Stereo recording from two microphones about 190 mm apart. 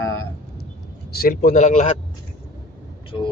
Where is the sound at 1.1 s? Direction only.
50° left (ahead or behind).